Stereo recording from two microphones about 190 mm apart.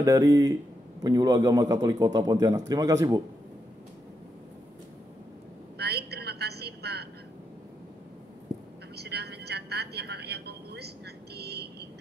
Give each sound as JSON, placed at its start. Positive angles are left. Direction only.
{"t": 0.0, "sound": "a man's voice", "side_deg": -15}
{"t": 5.8, "sound": "a sound", "side_deg": -60}
{"t": 8.9, "sound": "vehicle", "side_deg": -60}